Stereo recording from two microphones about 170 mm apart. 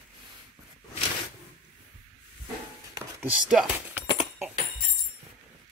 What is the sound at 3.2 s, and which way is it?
Speech, 5° right (ahead or behind).